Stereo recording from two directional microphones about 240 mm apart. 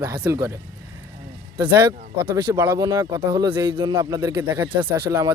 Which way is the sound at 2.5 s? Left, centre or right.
Centre.